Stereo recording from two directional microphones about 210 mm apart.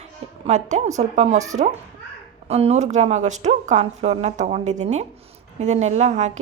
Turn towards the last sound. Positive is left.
turn(degrees=-35)  # may be behind; listen again after turning